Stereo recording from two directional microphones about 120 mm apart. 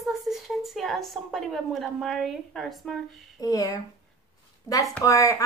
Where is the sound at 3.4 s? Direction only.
30° left (ahead or behind).